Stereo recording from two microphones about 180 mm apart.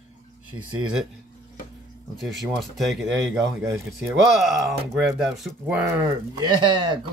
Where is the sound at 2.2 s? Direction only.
Centre (ahead or behind).